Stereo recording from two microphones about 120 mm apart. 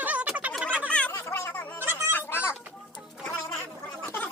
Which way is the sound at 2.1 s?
20° left (ahead or behind).